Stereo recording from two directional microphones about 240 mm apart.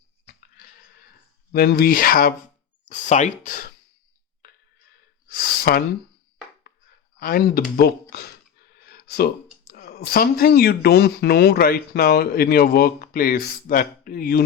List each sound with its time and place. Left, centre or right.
1.5 s speech: left
5.3 s gasp: left
7.2 s speech: left
9.0 s speech: left